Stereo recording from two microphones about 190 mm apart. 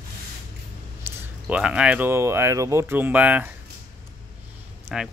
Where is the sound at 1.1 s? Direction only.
10° right (ahead or behind).